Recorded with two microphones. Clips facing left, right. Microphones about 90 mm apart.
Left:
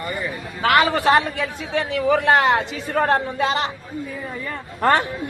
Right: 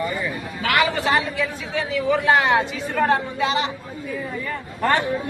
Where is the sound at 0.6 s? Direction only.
35° left (ahead or behind).